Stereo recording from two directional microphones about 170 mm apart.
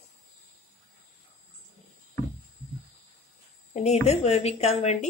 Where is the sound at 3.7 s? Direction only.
40° left (ahead or behind).